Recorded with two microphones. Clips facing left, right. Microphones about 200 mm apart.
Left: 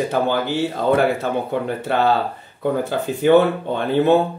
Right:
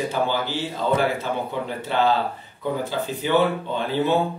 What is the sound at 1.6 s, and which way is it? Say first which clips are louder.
Speech: left 1 dB; 55° left (ahead or behind).